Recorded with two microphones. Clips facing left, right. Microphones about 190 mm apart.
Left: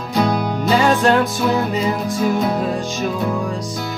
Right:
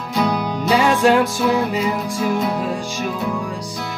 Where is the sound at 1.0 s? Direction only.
10° right (ahead or behind).